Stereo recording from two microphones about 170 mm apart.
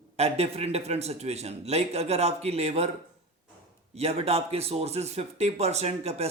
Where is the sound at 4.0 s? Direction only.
35° right (ahead or behind).